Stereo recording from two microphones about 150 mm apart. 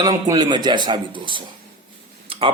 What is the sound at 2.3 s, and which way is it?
Tick-tock, 40° right (ahead or behind).